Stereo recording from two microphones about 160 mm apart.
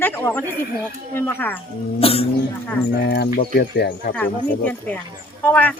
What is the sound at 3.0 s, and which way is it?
Speech, 90° left.